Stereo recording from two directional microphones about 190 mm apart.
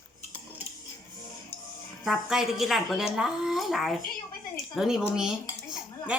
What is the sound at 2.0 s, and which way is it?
Dishes, centre (ahead or behind).